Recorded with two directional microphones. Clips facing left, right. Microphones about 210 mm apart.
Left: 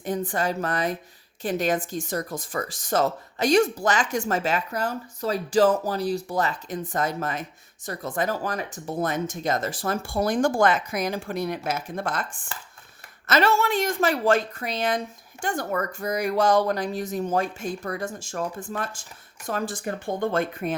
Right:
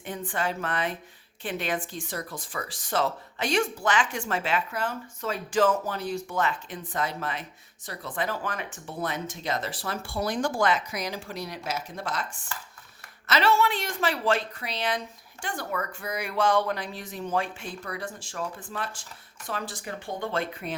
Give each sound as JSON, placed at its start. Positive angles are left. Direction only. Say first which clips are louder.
{"t": 0.0, "sound": "a woman's voice", "louder": "left 5 dB", "side_deg": 40}